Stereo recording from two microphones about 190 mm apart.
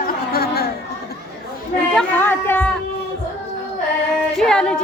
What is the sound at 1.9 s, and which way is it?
Music, 10° left (ahead or behind).